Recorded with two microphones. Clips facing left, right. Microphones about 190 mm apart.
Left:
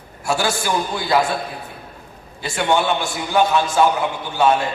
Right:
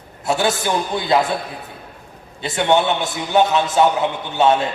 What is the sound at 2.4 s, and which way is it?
A man's voice, 25° right (ahead or behind).